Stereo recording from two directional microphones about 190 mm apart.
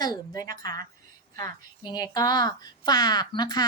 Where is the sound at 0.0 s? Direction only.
20° left (ahead or behind).